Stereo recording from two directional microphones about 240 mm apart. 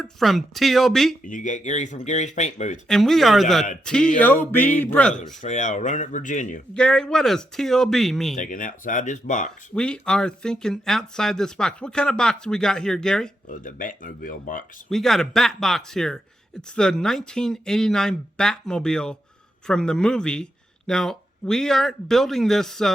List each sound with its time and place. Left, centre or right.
0.0 s speech: centre
1.2 s speech: left
2.8 s speech: centre
5.4 s speech: left
6.7 s speech: centre
8.4 s speech: left
9.7 s speech: centre
13.5 s speech: left
14.8 s speech: centre